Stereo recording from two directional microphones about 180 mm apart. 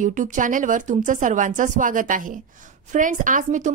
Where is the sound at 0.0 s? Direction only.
45° right (ahead or behind).